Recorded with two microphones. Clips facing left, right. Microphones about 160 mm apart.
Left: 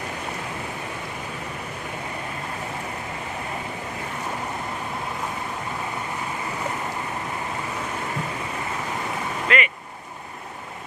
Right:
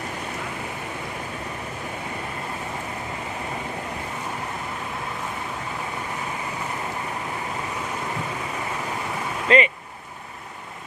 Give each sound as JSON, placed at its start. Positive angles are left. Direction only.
{"t": 9.5, "sound": "speech", "side_deg": -30}